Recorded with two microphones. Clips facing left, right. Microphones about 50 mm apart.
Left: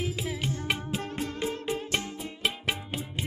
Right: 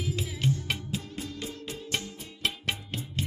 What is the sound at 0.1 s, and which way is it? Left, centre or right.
Music, centre.